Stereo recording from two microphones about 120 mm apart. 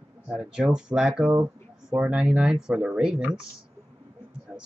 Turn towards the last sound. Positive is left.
turn(degrees=-5)  # may be behind; listen again after turning